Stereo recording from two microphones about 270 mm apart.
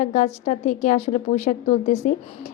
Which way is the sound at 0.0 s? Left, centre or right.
Left.